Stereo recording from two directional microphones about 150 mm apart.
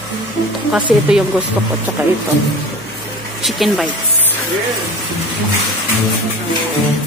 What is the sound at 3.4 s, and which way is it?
Speech, centre (ahead or behind).